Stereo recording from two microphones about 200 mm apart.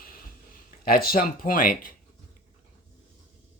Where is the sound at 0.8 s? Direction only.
45° left (ahead or behind).